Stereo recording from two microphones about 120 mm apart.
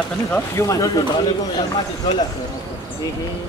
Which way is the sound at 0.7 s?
30° left (ahead or behind).